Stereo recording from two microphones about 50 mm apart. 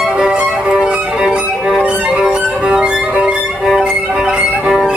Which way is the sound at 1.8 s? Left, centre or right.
Right.